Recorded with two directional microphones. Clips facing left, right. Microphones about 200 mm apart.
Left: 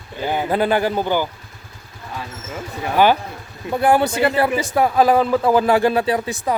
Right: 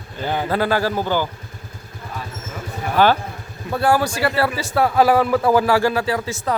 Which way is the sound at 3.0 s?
15° left (ahead or behind).